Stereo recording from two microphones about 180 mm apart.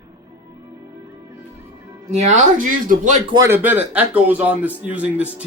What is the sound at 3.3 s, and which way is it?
A man's voice, 15° right (ahead or behind).